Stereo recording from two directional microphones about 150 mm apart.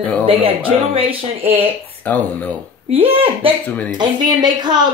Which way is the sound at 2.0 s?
10° left (ahead or behind).